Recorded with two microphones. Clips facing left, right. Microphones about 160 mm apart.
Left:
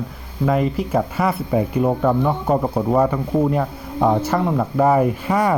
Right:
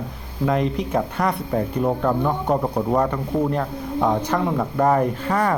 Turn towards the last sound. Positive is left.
turn(degrees=10)  # may be behind; listen again after turning